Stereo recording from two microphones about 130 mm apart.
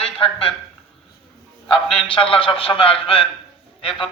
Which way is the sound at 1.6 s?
45° left (ahead or behind).